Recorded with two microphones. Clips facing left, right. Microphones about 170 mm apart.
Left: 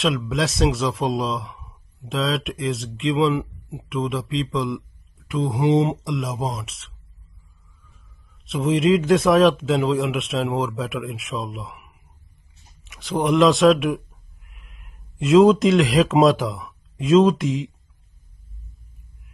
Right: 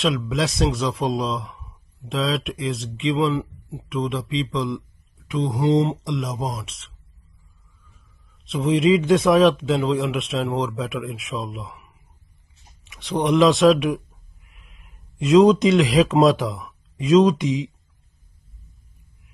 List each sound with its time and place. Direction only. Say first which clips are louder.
0.3 s a man's voice: left 1 dB; centre (ahead or behind)
3.3 s speech: even; 15° left (ahead or behind)
3.9 s a man's voice: even; centre (ahead or behind)
5.6 s speech: left 1 dB; 15° left (ahead or behind)
6.0 s a man's voice: left 1 dB; centre (ahead or behind)
8.5 s a man's voice: right 1 dB; centre (ahead or behind)
12.8 s a man's voice: even; centre (ahead or behind)